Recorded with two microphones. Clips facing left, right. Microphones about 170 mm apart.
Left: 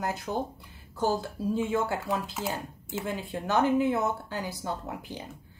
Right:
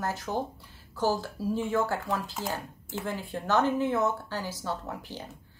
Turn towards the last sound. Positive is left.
turn(degrees=15)  # may be behind; listen again after turning